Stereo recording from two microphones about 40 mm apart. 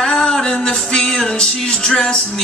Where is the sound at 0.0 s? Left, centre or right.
Centre.